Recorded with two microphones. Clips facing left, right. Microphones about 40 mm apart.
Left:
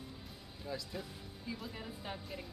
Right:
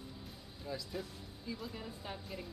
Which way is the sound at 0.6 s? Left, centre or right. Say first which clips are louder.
Right 1 dB; centre.